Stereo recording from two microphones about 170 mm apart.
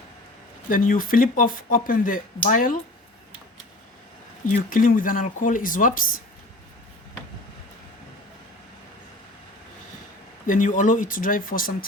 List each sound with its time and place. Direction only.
0.7 s speech: 55° left (ahead or behind)
4.4 s speech: 50° left (ahead or behind)
10.4 s speech: 50° left (ahead or behind)